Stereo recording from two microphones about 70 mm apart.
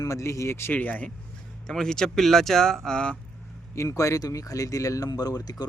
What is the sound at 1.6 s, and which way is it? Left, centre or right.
Speech, centre.